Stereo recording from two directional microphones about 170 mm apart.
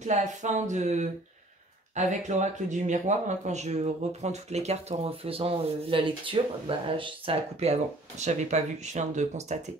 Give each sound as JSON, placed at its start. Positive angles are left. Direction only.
{"t": 0.0, "sound": "speech", "side_deg": -45}